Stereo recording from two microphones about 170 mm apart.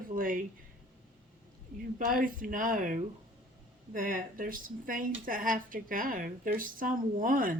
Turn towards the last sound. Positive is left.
turn(degrees=-55)  # may be behind; listen again after turning